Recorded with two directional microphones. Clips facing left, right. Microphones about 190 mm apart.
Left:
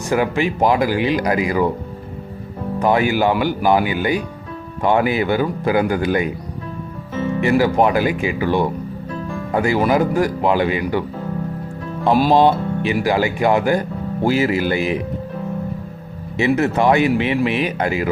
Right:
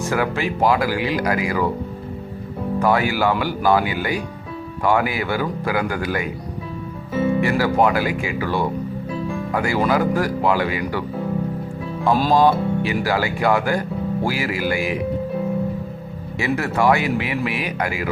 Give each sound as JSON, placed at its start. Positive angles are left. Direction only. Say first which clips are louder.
{"t": 0.0, "sound": "speech", "louder": "left 3 dB", "side_deg": 20}
{"t": 2.7, "sound": "speech", "louder": "left 3 dB", "side_deg": 20}
{"t": 7.1, "sound": "music", "louder": "right 3 dB", "side_deg": -10}
{"t": 7.4, "sound": "speech", "louder": "left 7 dB", "side_deg": 20}
{"t": 9.0, "sound": "music", "louder": "even", "side_deg": -10}
{"t": 9.5, "sound": "speech", "louder": "left 4 dB", "side_deg": 20}
{"t": 12.0, "sound": "speech", "louder": "left 3 dB", "side_deg": 10}
{"t": 12.3, "sound": "speech", "louder": "left 2 dB", "side_deg": 25}
{"t": 16.4, "sound": "speech", "louder": "left 4 dB", "side_deg": 20}